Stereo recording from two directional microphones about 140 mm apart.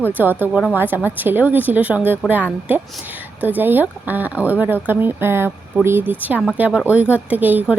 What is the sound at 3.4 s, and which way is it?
Speech, 15° right (ahead or behind).